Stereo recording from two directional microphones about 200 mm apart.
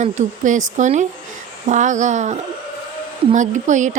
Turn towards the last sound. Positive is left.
turn(degrees=-40)  # may be behind; listen again after turning